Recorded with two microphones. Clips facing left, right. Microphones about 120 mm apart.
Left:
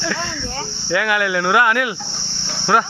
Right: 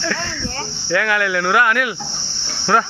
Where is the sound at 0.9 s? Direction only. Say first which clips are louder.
Even; 20° left (ahead or behind).